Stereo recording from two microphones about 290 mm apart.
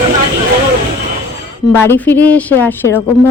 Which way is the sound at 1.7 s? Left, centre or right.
Centre.